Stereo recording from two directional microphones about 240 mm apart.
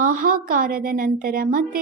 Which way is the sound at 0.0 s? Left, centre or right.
Right.